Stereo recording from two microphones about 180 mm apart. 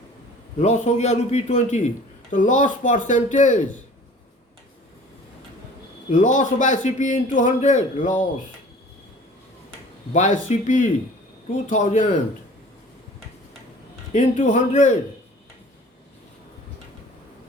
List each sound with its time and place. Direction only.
0.6 s a man's voice: 40° left (ahead or behind)
6.1 s a man's voice: 45° left (ahead or behind)
10.1 s a man's voice: 40° left (ahead or behind)
14.1 s a man's voice: 40° left (ahead or behind)